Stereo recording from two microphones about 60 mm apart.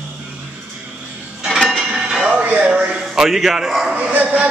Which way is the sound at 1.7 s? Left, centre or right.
Centre.